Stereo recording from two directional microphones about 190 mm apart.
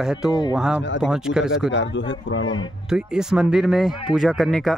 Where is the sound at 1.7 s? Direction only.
70° left (ahead or behind).